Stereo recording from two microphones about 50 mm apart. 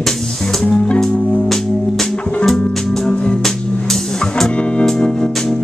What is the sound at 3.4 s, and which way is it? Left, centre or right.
Music, centre.